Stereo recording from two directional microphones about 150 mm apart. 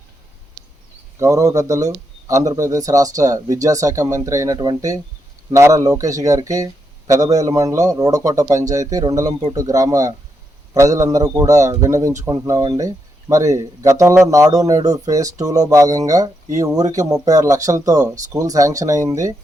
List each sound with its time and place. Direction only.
1.2 s speech: 20° right (ahead or behind)